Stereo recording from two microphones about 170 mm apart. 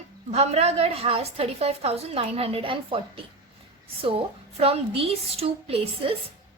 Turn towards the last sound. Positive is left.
turn(degrees=-35)  # may be behind; listen again after turning